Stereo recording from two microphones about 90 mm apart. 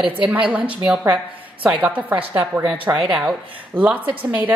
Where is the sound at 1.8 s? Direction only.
15° right (ahead or behind).